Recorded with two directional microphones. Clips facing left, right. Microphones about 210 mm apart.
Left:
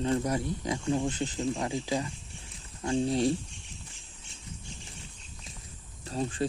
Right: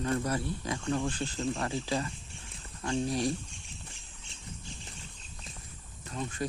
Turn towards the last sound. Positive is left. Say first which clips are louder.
# left 5 dB
turn(degrees=30)  # may be behind; listen again after turning